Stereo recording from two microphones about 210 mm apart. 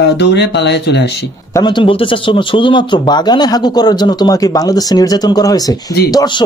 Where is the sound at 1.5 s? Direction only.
20° left (ahead or behind).